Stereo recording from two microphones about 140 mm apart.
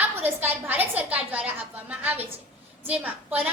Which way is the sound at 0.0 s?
15° right (ahead or behind).